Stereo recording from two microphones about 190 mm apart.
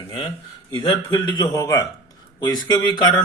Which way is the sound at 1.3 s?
20° left (ahead or behind).